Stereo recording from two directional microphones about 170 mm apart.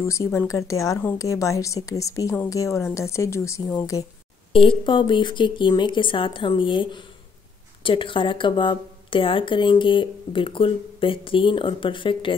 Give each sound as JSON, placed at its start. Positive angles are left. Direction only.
{"t": 0.0, "sound": "speech", "side_deg": 15}
{"t": 4.5, "sound": "speech", "side_deg": 30}